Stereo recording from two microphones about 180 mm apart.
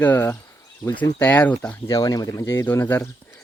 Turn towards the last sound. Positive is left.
turn(degrees=15)  # may be behind; listen again after turning